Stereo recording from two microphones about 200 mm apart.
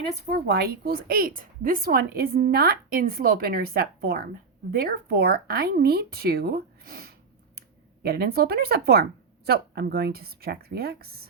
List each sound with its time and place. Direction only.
0.3 s a woman's voice: 55° right (ahead or behind)